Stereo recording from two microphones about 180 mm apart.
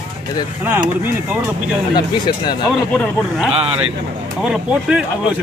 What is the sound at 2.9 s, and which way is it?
Speech, centre (ahead or behind).